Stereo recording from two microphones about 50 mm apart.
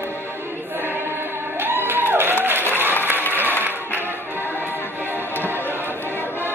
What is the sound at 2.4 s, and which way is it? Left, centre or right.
Applause, right.